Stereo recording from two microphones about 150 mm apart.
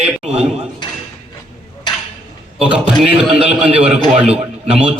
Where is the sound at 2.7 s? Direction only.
5° right (ahead or behind).